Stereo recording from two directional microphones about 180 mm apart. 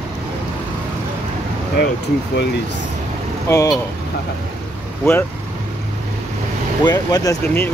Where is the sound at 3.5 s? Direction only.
20° left (ahead or behind).